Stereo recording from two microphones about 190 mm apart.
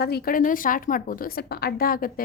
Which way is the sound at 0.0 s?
55° left (ahead or behind).